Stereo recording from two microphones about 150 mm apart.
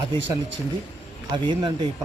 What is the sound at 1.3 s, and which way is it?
Speech, 30° right (ahead or behind).